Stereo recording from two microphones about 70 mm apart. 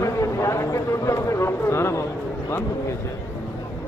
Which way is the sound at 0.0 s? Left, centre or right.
Left.